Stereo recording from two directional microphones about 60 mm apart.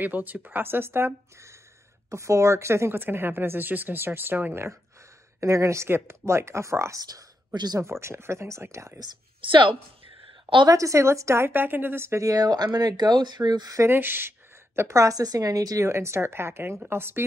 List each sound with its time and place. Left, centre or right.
0.0 s a woman's voice: right
5.4 s a woman's voice: right
5.9 s speech: right
7.0 s speech: right
7.8 s speech: right
10.7 s a woman's voice: right
11.5 s a woman's voice: right
12.2 s speech: right
13.8 s a woman's voice: right
14.8 s a woman's voice: right
15.9 s a woman's voice: right